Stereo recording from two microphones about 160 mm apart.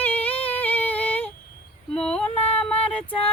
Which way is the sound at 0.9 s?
10° left (ahead or behind).